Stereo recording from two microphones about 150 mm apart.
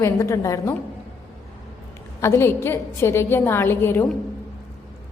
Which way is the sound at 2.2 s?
15° left (ahead or behind).